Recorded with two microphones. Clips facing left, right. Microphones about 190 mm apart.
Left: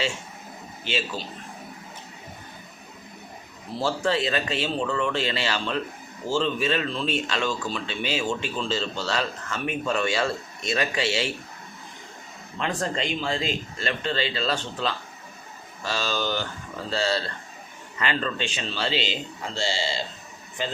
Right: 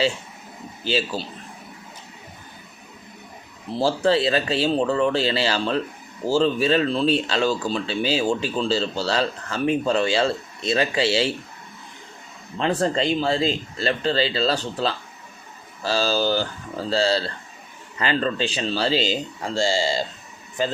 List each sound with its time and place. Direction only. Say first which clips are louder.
0.9 s speech: right 5 dB; 35° right (ahead or behind)
3.8 s speech: right 5 dB; 30° right (ahead or behind)
12.5 s speech: right 6 dB; 30° right (ahead or behind)